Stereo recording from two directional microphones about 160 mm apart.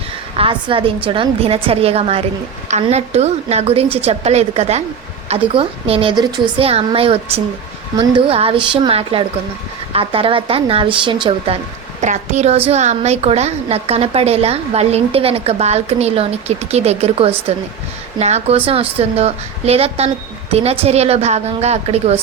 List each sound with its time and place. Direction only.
0.3 s a woman's voice: 35° right (ahead or behind)
11.9 s a woman's voice: 50° right (ahead or behind)